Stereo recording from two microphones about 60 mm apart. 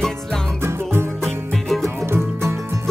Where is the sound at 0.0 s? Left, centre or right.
Centre.